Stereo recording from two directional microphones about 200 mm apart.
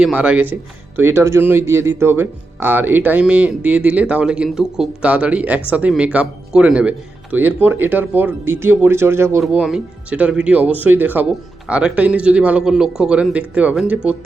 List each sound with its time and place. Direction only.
0.0 s a man's voice: 5° right (ahead or behind)